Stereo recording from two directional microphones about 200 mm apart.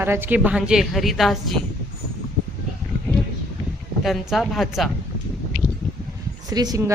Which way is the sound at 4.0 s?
Centre (ahead or behind).